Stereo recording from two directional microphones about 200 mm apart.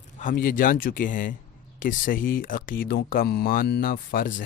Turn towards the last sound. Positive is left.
turn(degrees=45)  # may be behind; listen again after turning